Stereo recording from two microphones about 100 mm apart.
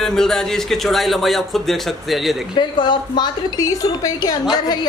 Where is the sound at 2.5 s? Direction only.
50° left (ahead or behind).